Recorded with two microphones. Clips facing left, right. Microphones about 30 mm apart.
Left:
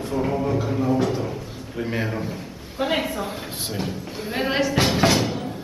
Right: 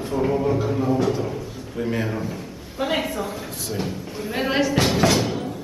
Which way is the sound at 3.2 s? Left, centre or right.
Left.